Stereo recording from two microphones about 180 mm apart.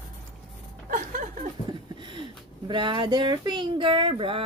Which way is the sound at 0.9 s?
45° right (ahead or behind).